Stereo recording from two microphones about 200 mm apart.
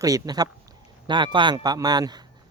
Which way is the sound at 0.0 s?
20° right (ahead or behind).